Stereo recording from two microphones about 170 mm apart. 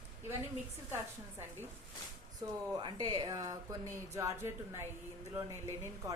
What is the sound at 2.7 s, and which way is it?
Speech, 25° right (ahead or behind).